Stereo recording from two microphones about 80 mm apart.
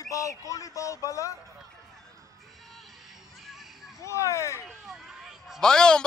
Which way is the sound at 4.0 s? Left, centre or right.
Left.